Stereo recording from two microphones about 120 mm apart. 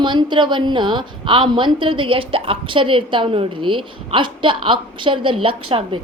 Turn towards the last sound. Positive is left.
turn(degrees=-45)  # may be behind; listen again after turning